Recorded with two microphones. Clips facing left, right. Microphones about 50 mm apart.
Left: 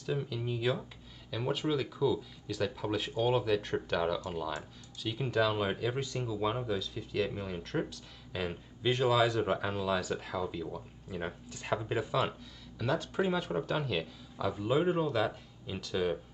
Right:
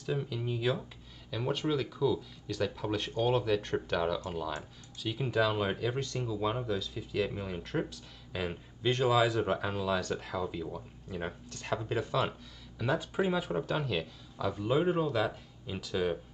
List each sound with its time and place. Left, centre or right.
0.0 s speech: centre
12.7 s speech: centre